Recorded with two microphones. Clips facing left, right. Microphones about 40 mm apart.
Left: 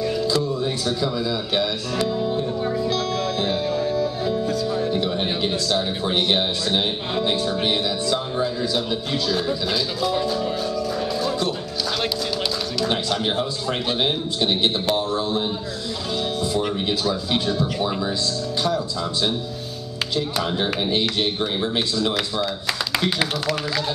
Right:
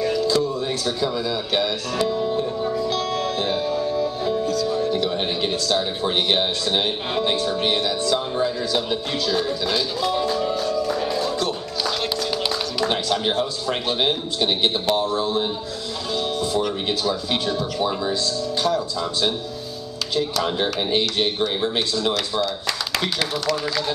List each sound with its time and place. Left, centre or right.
0.1 s a sound: centre
2.6 s music: centre
2.9 s music: centre
4.6 s music: centre
5.1 s a sound: centre
6.0 s speech: centre
7.5 s speech: centre
11.2 s music: centre
12.9 s speech: centre
20.4 s speech: centre
22.9 s speech: centre